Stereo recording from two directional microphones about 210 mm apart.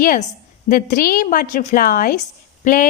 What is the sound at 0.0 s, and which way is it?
A woman's voice, 40° left (ahead or behind).